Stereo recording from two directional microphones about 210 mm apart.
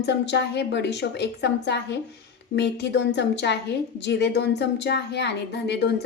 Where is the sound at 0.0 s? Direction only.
55° left (ahead or behind).